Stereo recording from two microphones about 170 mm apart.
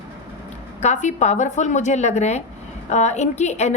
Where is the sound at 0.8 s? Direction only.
45° left (ahead or behind).